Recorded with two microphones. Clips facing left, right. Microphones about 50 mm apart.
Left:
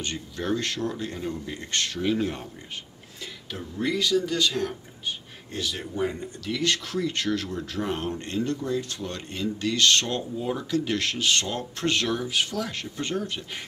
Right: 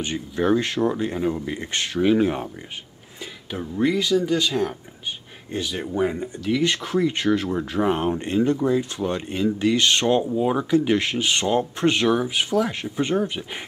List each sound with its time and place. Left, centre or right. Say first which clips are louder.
0.0 s speech: right 8 dB; centre
3.5 s speech: right 6 dB; centre